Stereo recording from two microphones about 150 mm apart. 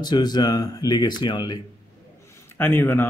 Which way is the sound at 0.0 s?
25° left (ahead or behind).